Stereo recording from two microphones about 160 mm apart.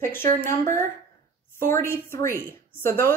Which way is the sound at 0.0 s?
15° left (ahead or behind).